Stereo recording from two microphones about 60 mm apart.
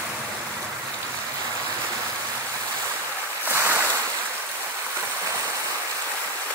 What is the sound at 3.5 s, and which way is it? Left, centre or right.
Ocean, right.